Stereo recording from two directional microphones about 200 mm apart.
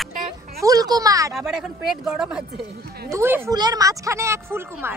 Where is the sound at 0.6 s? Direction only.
15° right (ahead or behind).